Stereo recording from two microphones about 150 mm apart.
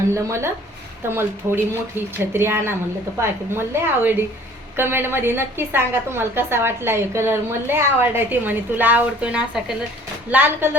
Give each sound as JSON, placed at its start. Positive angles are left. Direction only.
{"t": 0.1, "sound": "a woman's voice", "side_deg": -20}